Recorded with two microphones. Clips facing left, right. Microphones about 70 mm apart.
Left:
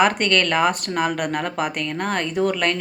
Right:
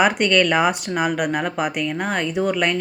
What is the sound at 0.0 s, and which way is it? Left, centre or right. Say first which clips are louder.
Speech: right 1 dB; centre.